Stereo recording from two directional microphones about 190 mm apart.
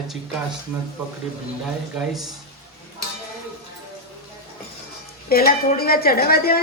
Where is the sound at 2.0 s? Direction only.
Centre (ahead or behind).